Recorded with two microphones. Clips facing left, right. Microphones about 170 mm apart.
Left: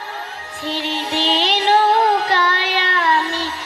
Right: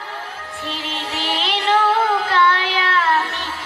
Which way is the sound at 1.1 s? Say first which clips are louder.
Left 5 dB; 75° left (ahead or behind).